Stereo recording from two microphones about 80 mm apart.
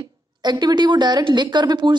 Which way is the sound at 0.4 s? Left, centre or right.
Right.